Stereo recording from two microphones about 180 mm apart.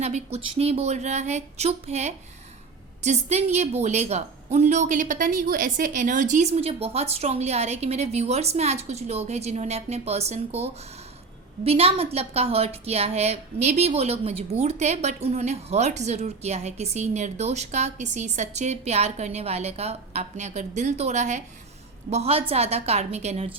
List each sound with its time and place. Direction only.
0.0 s a woman's voice: 35° right (ahead or behind)